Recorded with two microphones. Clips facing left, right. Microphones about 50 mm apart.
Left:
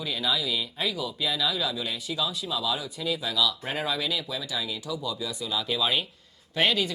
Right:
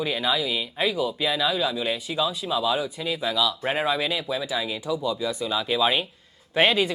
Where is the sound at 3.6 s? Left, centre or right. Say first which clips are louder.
Right 5 dB; right.